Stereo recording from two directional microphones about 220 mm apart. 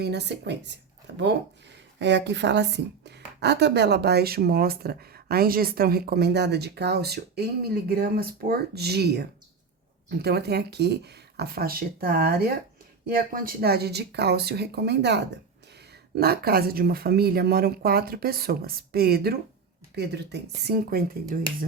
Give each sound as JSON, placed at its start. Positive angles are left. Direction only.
{"t": 0.0, "sound": "speech", "side_deg": -50}